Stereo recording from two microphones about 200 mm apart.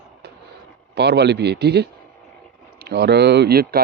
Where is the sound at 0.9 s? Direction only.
55° right (ahead or behind).